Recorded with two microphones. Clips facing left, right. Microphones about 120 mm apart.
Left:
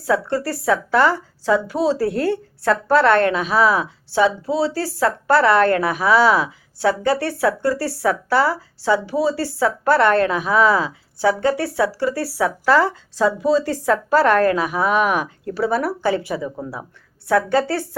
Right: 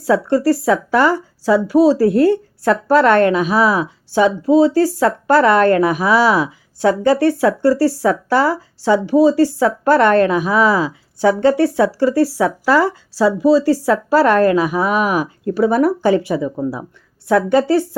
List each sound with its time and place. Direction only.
0.3 s speech: 15° right (ahead or behind)
7.6 s speech: 35° right (ahead or behind)
8.3 s speech: 20° right (ahead or behind)
11.2 s speech: 25° right (ahead or behind)